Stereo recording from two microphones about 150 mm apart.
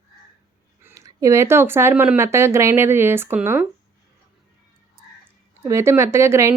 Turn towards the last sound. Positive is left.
turn(degrees=-20)  # may be behind; listen again after turning